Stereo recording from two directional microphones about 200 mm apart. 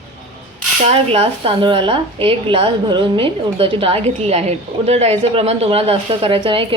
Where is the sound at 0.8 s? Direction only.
30° right (ahead or behind).